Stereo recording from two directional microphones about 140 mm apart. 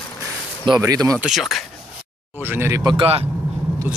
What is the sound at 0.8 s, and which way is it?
Speech, 25° right (ahead or behind).